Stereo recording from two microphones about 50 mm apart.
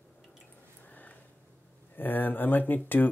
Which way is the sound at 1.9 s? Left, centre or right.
Left.